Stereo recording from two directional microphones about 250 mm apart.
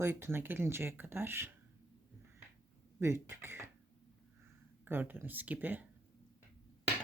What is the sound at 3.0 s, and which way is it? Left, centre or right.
Speech, centre.